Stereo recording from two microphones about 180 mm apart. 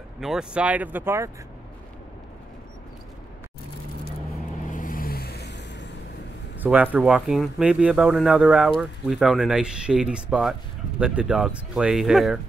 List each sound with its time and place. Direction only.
0.2 s speech: 5° right (ahead or behind)
4.6 s vehicle: 45° left (ahead or behind); by 5.9 s 75° left (ahead or behind)
6.6 s speech: 10° right (ahead or behind)